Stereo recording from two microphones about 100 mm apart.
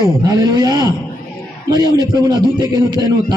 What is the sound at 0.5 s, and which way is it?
Speech, 45° right (ahead or behind).